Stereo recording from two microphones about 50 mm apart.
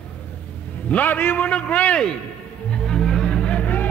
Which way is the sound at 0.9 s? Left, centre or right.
Left.